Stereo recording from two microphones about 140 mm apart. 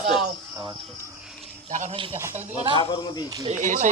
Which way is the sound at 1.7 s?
60° right (ahead or behind).